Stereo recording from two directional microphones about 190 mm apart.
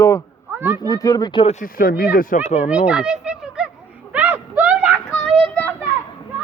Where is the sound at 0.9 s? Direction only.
20° left (ahead or behind); by 2.7 s 35° left (ahead or behind).